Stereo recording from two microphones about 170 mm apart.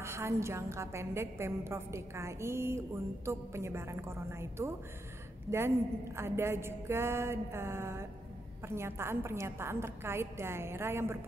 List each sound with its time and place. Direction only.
0.0 s a woman's voice: 15° right (ahead or behind)